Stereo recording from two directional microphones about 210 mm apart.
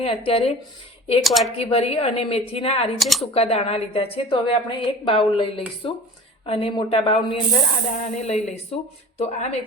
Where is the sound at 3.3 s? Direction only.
30° left (ahead or behind).